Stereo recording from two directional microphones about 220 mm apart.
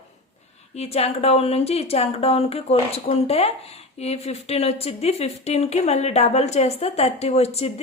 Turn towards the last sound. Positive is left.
turn(degrees=30)  # may be behind; listen again after turning